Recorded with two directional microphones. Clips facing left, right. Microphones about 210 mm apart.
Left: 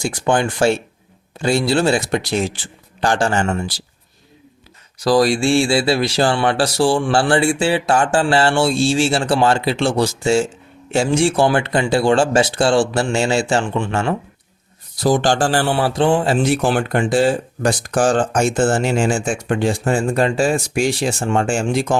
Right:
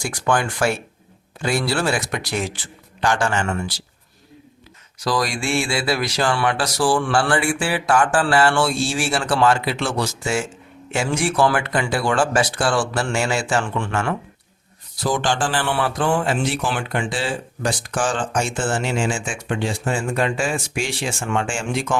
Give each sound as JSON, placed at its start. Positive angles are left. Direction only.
{"t": 0.0, "sound": "speech", "side_deg": 25}
{"t": 5.0, "sound": "speech", "side_deg": 30}
{"t": 14.9, "sound": "speech", "side_deg": 40}
{"t": 15.7, "sound": "speech", "side_deg": 30}